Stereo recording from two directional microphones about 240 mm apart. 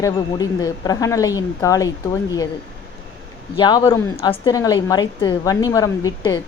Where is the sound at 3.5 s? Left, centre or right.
Centre.